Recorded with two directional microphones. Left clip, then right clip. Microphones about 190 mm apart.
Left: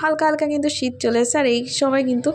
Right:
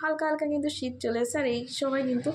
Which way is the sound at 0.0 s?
40° left (ahead or behind).